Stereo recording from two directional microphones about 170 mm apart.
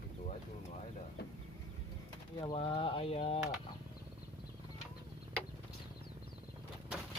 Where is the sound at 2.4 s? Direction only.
30° left (ahead or behind).